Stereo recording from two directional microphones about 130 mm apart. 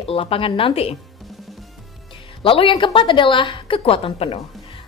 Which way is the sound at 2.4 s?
40° left (ahead or behind).